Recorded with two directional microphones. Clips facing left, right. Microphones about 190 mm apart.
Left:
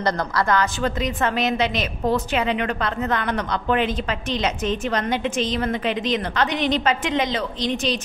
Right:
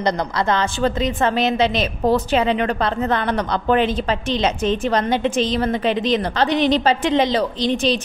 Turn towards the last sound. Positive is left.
turn(degrees=-30)  # may be behind; listen again after turning